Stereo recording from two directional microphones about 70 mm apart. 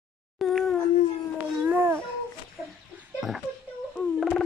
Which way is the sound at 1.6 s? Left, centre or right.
Right.